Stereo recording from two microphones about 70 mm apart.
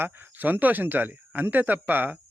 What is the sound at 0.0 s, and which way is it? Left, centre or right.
Speech, right.